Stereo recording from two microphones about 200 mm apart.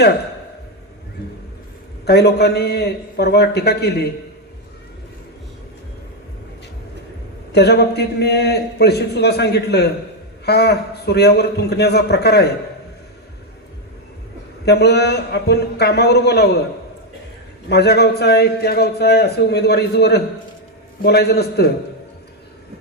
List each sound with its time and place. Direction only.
2.0 s a man's voice: 55° left (ahead or behind)
7.5 s a man's voice: 55° left (ahead or behind)
14.6 s a man's voice: 55° left (ahead or behind)
17.7 s a man's voice: 55° left (ahead or behind)